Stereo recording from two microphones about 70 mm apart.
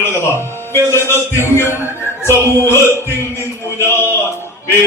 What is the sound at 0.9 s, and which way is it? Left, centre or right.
A man's voice, left.